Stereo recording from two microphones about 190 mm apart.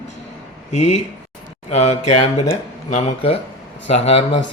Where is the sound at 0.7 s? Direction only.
40° left (ahead or behind).